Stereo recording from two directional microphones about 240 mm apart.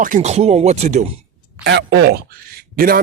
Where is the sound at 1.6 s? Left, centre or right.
Right.